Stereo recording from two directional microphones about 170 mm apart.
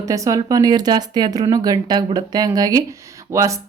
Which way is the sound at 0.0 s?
20° right (ahead or behind).